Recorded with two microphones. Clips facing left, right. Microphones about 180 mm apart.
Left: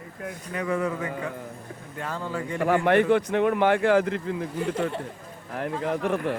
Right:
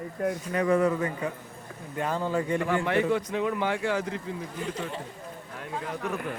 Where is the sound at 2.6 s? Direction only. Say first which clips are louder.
Left 10 dB; 55° left (ahead or behind).